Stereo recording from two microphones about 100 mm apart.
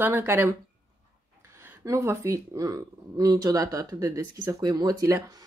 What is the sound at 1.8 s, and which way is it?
Speech, 30° right (ahead or behind).